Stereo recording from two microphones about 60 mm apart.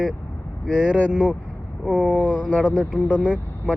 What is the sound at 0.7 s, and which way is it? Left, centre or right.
Speech, centre.